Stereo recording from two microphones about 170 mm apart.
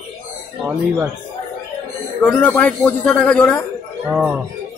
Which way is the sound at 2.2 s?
10° left (ahead or behind).